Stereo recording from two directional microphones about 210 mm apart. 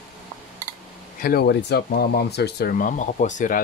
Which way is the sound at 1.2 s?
50° left (ahead or behind).